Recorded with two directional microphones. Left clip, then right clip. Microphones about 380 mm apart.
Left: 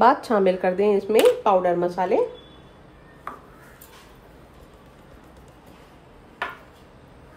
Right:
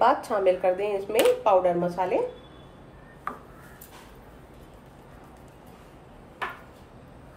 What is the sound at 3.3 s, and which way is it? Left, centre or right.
Chopping, centre.